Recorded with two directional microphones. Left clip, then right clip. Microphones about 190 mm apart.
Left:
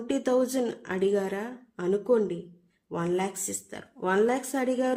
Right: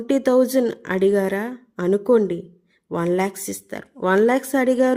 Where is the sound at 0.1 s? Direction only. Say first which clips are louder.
Right 9 dB; 40° right (ahead or behind).